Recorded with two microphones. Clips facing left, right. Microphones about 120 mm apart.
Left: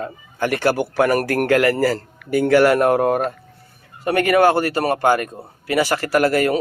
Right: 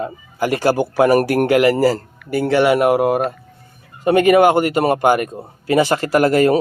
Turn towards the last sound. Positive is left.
turn(degrees=-25)  # may be behind; listen again after turning